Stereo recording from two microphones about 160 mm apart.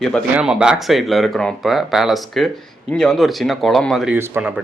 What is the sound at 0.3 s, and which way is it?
A man's voice, 5° right (ahead or behind).